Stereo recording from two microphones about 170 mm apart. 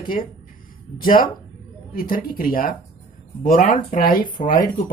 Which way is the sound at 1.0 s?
55° left (ahead or behind).